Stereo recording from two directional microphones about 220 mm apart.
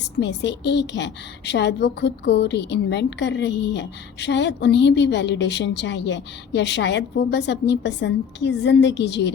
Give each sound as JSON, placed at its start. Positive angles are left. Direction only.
{"t": 0.2, "sound": "a woman's voice", "side_deg": 50}